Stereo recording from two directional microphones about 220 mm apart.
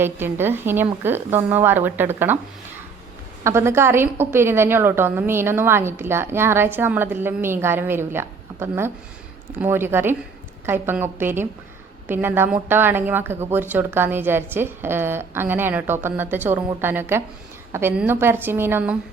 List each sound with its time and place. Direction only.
0.0 s a woman's voice: 10° right (ahead or behind)
3.4 s a woman's voice: 10° right (ahead or behind)